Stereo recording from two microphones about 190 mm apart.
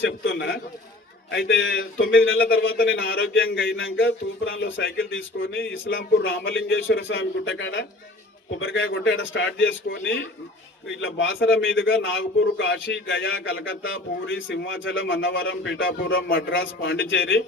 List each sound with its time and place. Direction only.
0.0 s a sound: 75° left (ahead or behind)
1.3 s speech: 75° left (ahead or behind)
2.0 s a man's voice: 90° left
2.8 s a man's voice: 80° left
8.5 s a man's voice: 90° left